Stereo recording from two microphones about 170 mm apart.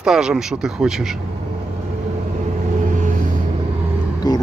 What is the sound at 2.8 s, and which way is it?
Vehicle, 50° right (ahead or behind).